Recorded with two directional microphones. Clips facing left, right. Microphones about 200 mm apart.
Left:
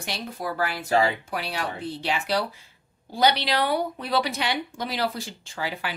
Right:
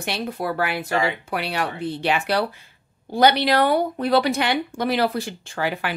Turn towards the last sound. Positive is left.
turn(degrees=-60)  # may be behind; listen again after turning